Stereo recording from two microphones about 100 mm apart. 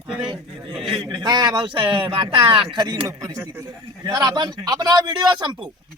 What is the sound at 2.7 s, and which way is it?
A man's voice, 45° right (ahead or behind).